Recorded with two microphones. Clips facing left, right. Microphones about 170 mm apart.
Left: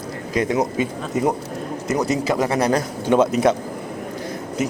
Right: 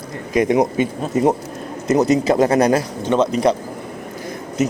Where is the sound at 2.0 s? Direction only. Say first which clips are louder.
Right 6 dB; 20° right (ahead or behind).